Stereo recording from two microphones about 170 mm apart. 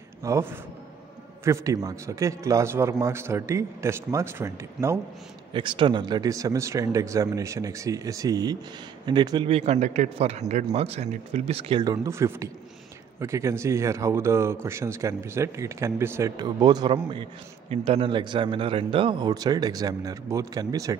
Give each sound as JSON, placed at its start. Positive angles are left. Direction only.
{"t": 0.2, "sound": "a man's voice", "side_deg": -15}
{"t": 5.5, "sound": "speech", "side_deg": -30}